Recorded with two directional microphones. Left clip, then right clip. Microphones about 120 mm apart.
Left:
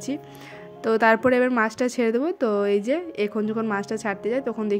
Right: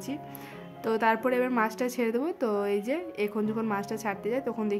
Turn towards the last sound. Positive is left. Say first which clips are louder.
# left 5 dB
turn(degrees=20)  # may be behind; listen again after turning